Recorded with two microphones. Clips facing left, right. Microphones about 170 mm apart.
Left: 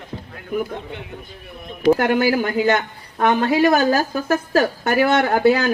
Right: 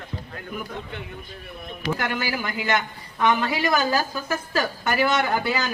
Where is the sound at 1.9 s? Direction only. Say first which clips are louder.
Left 9 dB; 50° left (ahead or behind).